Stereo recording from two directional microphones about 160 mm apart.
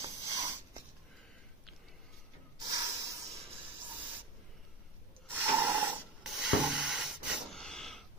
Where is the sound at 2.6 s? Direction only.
20° right (ahead or behind).